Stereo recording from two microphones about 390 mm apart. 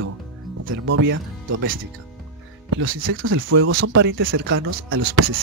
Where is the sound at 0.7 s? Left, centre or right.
Right.